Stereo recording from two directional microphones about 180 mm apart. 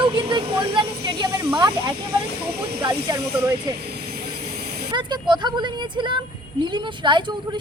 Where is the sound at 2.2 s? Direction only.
60° right (ahead or behind).